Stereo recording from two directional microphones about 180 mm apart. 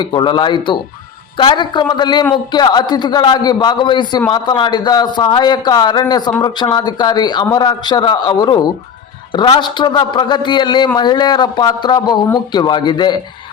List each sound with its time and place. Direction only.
0.0 s a man's voice: 25° left (ahead or behind)